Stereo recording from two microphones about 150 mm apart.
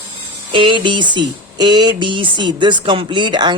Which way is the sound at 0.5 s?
30° right (ahead or behind).